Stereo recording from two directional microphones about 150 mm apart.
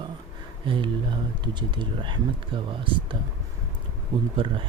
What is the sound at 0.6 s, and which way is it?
Speech, 35° right (ahead or behind).